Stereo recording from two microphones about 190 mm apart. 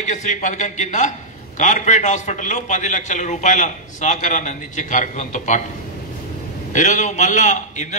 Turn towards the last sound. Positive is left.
turn(degrees=40)  # may be behind; listen again after turning